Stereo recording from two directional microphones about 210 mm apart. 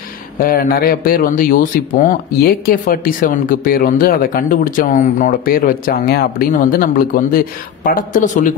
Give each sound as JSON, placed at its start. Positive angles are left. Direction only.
{"t": 0.4, "sound": "a man's voice", "side_deg": 45}